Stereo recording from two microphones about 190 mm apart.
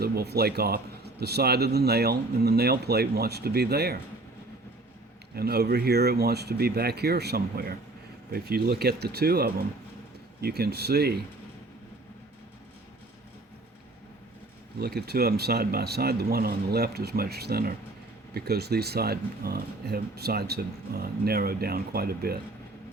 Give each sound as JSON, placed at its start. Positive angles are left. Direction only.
{"t": 0.0, "sound": "speech", "side_deg": -55}
{"t": 5.3, "sound": "speech", "side_deg": -55}
{"t": 14.8, "sound": "speech", "side_deg": -55}